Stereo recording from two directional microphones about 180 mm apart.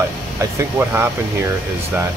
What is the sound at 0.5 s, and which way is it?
Speech, 10° right (ahead or behind).